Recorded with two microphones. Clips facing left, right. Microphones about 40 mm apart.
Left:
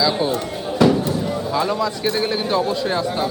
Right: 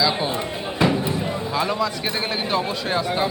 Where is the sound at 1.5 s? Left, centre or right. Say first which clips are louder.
Left 2 dB; centre.